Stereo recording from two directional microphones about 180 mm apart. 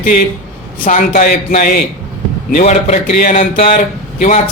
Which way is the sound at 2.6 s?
40° left (ahead or behind).